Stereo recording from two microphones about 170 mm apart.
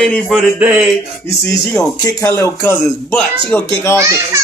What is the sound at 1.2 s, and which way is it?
Speech, 15° left (ahead or behind).